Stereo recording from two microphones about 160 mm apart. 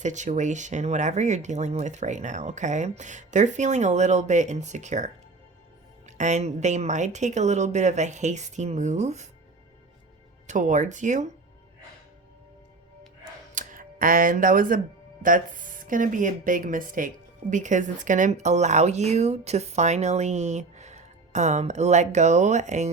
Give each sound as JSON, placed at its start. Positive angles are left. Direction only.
{"t": 0.0, "sound": "a woman's voice", "side_deg": -50}
{"t": 10.4, "sound": "a woman's voice", "side_deg": -50}
{"t": 13.5, "sound": "a sound", "side_deg": -55}
{"t": 15.2, "sound": "a woman's voice", "side_deg": -55}